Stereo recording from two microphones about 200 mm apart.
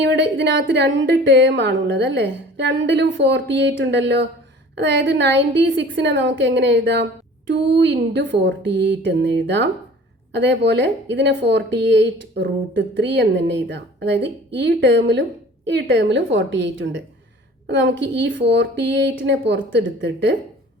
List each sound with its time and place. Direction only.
0.0 s a woman's voice: 60° right (ahead or behind)